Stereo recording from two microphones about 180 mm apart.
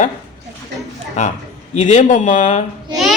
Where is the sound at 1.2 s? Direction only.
40° left (ahead or behind).